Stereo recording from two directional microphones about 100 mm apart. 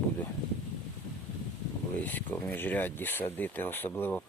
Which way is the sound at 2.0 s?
20° left (ahead or behind).